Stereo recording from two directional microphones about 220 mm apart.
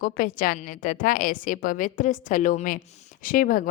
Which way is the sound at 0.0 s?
40° left (ahead or behind).